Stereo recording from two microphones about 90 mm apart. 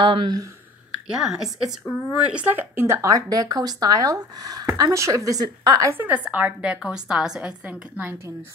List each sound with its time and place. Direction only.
0.0 s speech: 65° right (ahead or behind)
1.1 s a woman's voice: 5° right (ahead or behind); by 5.9 s 45° right (ahead or behind)
5.9 s a woman's voice: 20° right (ahead or behind)